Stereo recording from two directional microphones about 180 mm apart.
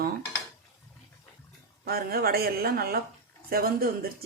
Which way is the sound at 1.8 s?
55° right (ahead or behind).